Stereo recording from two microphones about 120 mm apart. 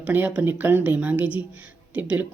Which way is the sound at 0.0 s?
15° right (ahead or behind).